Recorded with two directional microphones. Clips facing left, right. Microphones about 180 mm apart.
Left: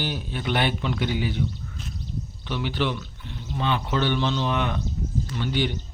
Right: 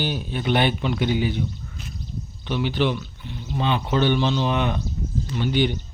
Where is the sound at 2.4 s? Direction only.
20° right (ahead or behind).